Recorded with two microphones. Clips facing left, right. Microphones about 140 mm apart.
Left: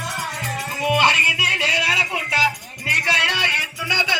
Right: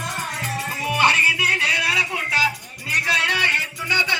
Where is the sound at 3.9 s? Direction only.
15° left (ahead or behind).